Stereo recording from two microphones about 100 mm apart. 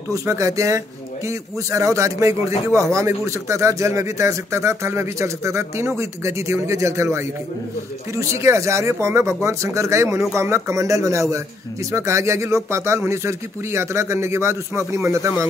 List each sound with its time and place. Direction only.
0.1 s a man's voice: 30° right (ahead or behind)